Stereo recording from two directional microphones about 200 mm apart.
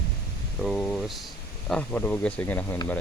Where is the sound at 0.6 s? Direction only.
Centre (ahead or behind).